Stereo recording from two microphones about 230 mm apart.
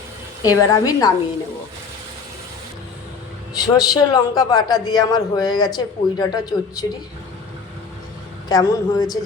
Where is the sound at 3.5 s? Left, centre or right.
Centre.